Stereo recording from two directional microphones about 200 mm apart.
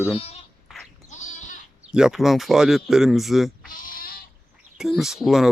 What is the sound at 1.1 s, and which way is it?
Goat, 35° left (ahead or behind).